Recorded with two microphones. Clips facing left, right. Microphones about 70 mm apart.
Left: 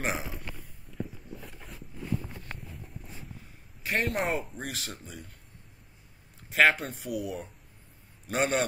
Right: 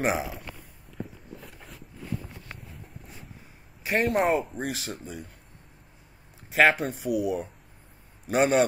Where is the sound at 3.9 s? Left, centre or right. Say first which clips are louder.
Right 6 dB; centre.